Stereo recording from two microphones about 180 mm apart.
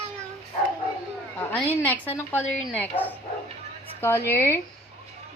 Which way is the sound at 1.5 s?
10° left (ahead or behind).